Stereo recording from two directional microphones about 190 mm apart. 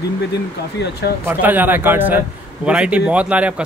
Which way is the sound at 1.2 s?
10° right (ahead or behind).